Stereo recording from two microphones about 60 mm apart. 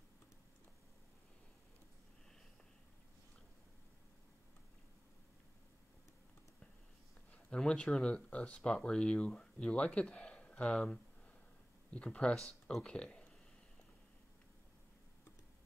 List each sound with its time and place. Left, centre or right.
7.5 s speech: centre